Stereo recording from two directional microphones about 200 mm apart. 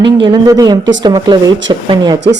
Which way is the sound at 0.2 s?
20° right (ahead or behind).